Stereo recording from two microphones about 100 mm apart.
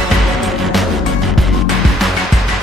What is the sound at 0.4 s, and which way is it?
Music, centre (ahead or behind).